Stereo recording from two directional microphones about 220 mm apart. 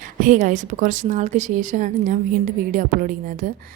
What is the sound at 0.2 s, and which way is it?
A woman's voice, 35° right (ahead or behind).